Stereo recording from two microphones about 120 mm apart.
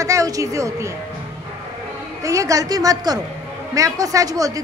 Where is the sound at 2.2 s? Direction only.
25° right (ahead or behind).